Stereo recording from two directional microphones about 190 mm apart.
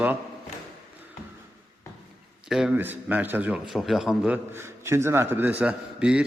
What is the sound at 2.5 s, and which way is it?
A man's voice, 5° right (ahead or behind).